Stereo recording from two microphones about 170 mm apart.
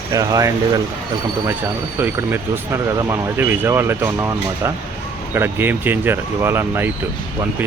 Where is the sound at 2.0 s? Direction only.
15° right (ahead or behind).